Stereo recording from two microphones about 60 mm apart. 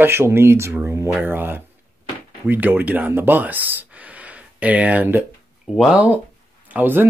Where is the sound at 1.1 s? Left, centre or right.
Right.